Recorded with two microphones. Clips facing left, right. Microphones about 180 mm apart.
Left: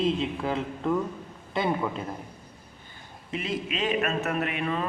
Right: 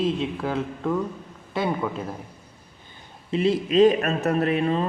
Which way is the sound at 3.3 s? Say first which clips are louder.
Right 10 dB; 30° right (ahead or behind).